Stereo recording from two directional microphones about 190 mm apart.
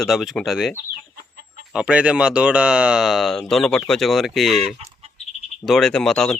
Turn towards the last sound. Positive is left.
turn(degrees=0)  # may be behind; listen again after turning